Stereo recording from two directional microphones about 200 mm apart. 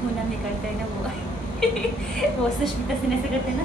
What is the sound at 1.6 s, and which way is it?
Speech, 5° left (ahead or behind).